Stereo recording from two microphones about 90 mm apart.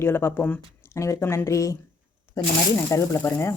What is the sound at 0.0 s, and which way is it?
Speech, 25° left (ahead or behind).